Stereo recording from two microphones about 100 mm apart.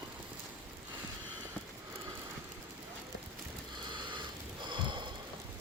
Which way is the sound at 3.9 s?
50° right (ahead or behind).